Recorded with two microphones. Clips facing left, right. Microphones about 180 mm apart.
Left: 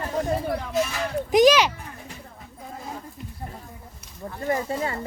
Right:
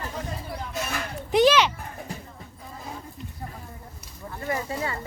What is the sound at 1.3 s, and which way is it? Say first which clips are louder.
Speech: left 2 dB; 10° left (ahead or behind).